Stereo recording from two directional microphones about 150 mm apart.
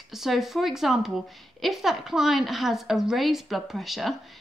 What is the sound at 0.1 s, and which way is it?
A woman's voice, centre (ahead or behind).